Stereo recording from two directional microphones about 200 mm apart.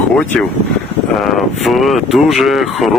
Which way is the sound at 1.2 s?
Centre (ahead or behind).